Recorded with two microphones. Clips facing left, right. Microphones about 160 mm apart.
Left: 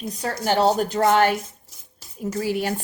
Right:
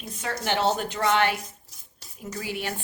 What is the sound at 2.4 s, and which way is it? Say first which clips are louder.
Speech: left 7 dB; 40° left (ahead or behind).